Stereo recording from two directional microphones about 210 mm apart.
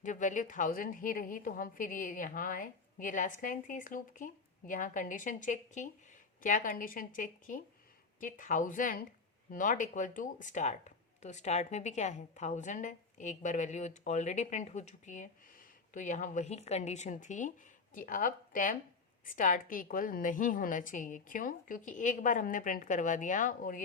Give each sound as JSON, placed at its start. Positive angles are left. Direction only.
{"t": 0.0, "sound": "speech", "side_deg": 35}